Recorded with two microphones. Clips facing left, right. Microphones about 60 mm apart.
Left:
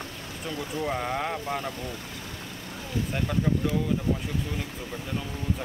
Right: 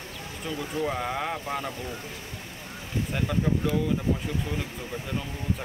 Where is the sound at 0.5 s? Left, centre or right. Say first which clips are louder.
Right 1 dB; centre.